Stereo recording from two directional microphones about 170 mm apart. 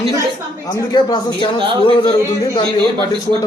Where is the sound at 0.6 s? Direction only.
25° left (ahead or behind).